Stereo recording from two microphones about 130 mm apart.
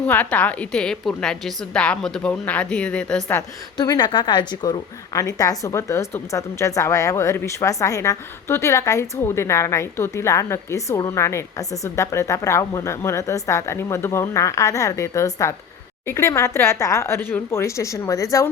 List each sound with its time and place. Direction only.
0.0 s a woman's voice: 10° left (ahead or behind)
3.8 s speech: 30° left (ahead or behind)
5.1 s a woman's voice: 25° left (ahead or behind)